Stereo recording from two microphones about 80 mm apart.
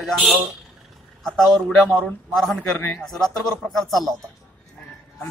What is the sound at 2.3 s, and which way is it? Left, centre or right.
A man's voice, centre.